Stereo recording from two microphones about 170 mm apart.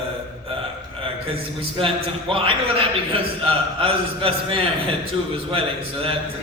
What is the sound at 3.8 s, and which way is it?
Speech, 30° right (ahead or behind).